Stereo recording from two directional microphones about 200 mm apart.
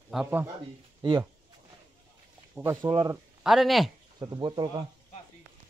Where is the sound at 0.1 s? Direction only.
5° right (ahead or behind).